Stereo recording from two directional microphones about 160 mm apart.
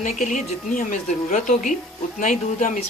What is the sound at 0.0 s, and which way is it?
A woman's voice, 50° left (ahead or behind).